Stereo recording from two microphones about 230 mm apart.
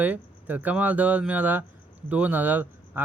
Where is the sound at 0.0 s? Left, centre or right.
Centre.